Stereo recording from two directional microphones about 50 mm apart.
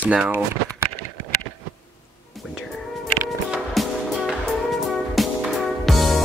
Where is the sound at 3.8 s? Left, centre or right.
Centre.